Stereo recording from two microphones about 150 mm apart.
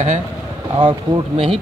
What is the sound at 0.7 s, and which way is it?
Speech, 35° right (ahead or behind).